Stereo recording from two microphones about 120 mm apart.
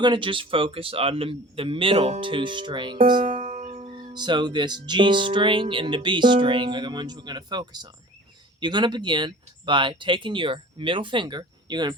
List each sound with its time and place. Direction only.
0.0 s speech: 40° right (ahead or behind)
3.2 s music: 90° right
3.9 s speech: 40° right (ahead or behind)